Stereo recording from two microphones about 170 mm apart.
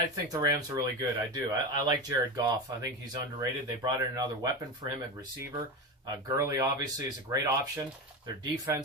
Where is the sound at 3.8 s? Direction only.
20° right (ahead or behind).